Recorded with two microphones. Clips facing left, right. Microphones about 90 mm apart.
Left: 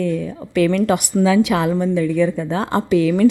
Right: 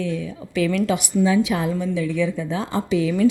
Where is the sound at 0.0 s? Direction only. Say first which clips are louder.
Left 5 dB; 50° left (ahead or behind).